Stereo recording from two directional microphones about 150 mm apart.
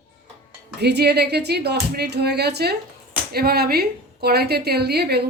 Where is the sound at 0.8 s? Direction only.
90° right.